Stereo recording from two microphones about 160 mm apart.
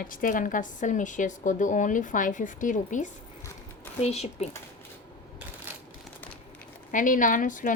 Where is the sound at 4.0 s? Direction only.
40° left (ahead or behind).